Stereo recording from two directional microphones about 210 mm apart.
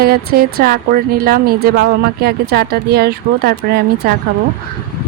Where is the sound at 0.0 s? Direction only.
45° right (ahead or behind).